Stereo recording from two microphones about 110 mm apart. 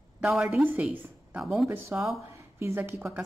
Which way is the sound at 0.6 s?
15° right (ahead or behind).